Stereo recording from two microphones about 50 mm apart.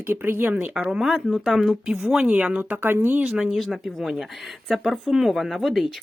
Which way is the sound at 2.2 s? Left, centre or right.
Right.